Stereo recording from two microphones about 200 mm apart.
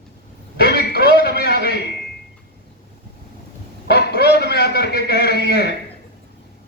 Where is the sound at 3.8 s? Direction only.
55° left (ahead or behind).